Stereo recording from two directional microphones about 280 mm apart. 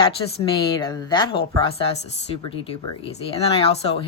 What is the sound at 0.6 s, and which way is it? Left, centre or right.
A woman's voice, centre.